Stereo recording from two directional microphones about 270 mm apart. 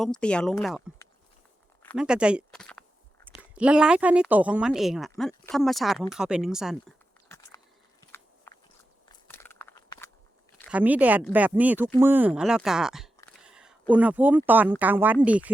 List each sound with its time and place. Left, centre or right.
0.0 s speech: centre
1.8 s speech: centre
9.0 s a sound: centre
10.6 s speech: centre